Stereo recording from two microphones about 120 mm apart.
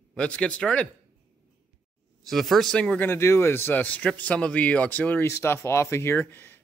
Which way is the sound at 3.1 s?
20° left (ahead or behind).